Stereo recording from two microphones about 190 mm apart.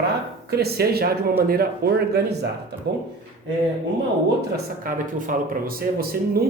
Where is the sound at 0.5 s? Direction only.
55° right (ahead or behind).